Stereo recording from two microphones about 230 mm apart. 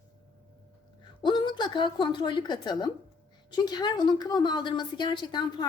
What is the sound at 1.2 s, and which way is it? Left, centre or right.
A woman's voice, centre.